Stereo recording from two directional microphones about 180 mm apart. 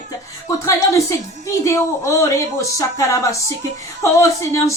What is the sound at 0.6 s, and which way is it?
Speech, 15° left (ahead or behind).